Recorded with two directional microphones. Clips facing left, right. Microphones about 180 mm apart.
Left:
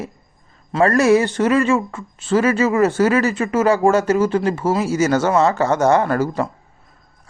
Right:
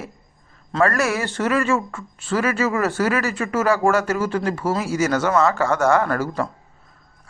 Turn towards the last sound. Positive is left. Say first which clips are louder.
# left 3 dB
turn(degrees=20)  # may be behind; listen again after turning